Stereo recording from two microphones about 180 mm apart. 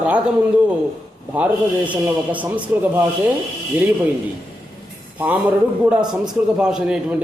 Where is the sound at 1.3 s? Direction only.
5° right (ahead or behind).